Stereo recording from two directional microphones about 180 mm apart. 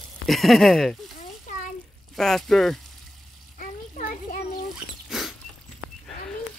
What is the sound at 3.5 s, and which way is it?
Children playing, 50° left (ahead or behind).